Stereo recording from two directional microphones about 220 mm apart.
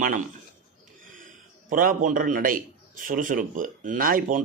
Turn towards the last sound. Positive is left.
turn(degrees=-40)  # may be behind; listen again after turning